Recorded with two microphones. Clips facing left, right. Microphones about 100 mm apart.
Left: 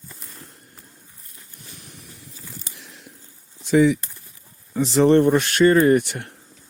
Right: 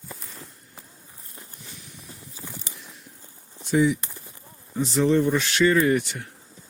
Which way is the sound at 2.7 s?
90° left.